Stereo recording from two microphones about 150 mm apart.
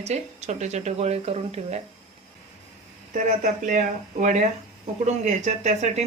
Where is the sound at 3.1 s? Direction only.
55° right (ahead or behind).